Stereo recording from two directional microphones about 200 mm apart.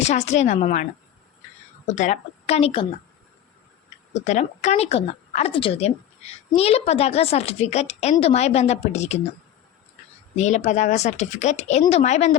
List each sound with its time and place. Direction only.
0.0 s speech: 35° left (ahead or behind)
1.9 s speech: 35° left (ahead or behind)
4.1 s speech: 35° left (ahead or behind)
10.3 s speech: 35° left (ahead or behind)